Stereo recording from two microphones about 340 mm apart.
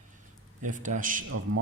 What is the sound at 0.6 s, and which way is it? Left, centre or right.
Speech, right.